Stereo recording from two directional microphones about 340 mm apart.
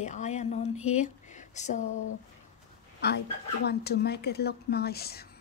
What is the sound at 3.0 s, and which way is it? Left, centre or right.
A woman's voice, left.